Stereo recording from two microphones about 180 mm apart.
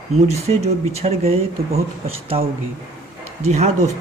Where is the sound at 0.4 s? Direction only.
35° right (ahead or behind).